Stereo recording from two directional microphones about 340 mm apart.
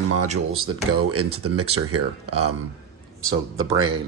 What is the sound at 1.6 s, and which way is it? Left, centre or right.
Speech, right.